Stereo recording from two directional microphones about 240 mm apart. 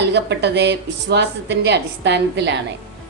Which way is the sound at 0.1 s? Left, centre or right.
Right.